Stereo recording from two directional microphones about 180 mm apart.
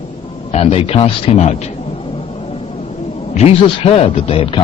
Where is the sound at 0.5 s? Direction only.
35° left (ahead or behind).